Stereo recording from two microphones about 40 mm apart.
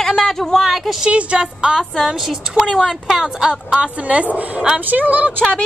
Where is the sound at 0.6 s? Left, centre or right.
Centre.